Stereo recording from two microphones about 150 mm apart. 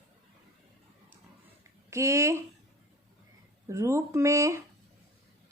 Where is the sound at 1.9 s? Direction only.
20° right (ahead or behind).